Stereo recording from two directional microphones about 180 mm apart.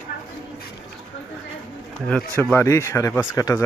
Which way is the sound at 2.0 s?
5° left (ahead or behind).